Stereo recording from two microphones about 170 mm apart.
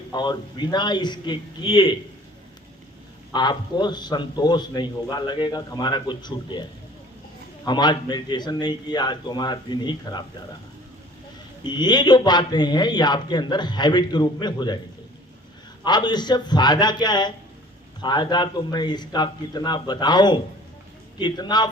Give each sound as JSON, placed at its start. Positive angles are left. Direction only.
{"t": 0.1, "sound": "a man's voice", "side_deg": 25}
{"t": 3.3, "sound": "a man's voice", "side_deg": 25}
{"t": 11.6, "sound": "a man's voice", "side_deg": 25}
{"t": 15.8, "sound": "a man's voice", "side_deg": 25}